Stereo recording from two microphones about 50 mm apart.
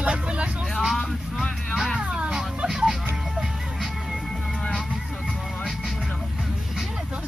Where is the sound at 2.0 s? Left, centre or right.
Centre.